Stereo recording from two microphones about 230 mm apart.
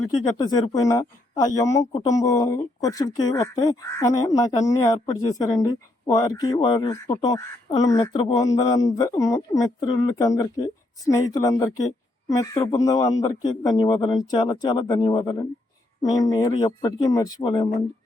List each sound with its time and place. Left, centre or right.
0.3 s speech: centre